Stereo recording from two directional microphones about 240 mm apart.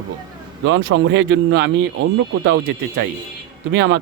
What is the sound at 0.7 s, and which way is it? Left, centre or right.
Speech, right.